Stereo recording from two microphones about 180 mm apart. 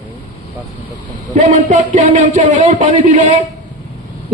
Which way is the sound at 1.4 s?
40° right (ahead or behind).